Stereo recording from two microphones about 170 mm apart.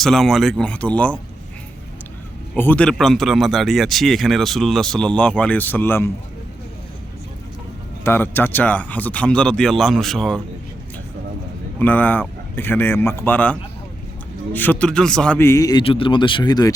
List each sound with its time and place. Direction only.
0.0 s speech: centre (ahead or behind)
2.6 s speech: 10° left (ahead or behind)
8.0 s speech: 15° left (ahead or behind)
11.8 s speech: 10° left (ahead or behind)
15.8 s speech: 30° left (ahead or behind)